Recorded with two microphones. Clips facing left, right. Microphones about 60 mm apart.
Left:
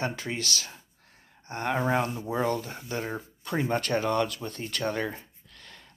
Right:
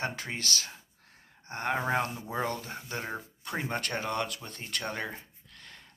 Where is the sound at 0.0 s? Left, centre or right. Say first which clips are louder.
Left 3 dB; right.